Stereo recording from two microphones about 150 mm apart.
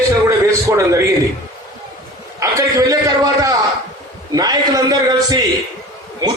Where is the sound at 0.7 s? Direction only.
20° right (ahead or behind).